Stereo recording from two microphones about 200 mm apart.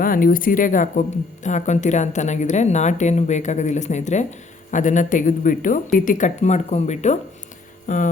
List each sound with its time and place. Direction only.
0.0 s a woman's voice: 45° left (ahead or behind)